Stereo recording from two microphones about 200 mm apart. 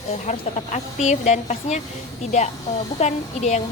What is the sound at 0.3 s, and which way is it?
A woman's voice, 35° left (ahead or behind).